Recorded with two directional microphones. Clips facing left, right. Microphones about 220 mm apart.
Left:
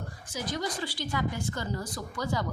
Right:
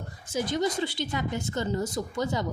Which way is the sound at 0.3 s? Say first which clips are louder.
Right 6 dB; 25° right (ahead or behind).